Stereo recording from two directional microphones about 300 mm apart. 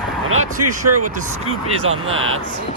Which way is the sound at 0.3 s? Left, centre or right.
Right.